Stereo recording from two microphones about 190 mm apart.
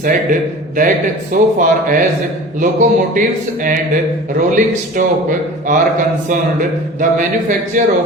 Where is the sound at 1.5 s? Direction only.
45° right (ahead or behind).